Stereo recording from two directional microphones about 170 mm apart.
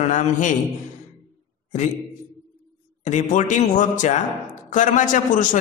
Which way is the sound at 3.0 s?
45° left (ahead or behind).